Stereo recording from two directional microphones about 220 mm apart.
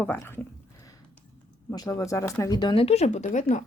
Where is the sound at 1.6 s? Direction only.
15° left (ahead or behind).